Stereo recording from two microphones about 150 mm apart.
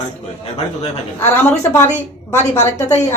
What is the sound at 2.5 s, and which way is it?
Speech, 45° left (ahead or behind).